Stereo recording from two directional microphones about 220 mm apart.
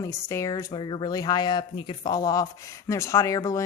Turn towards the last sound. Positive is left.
turn(degrees=15)  # may be behind; listen again after turning